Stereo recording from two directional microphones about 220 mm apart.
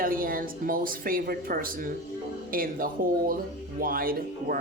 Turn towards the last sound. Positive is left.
turn(degrees=-40)  # may be behind; listen again after turning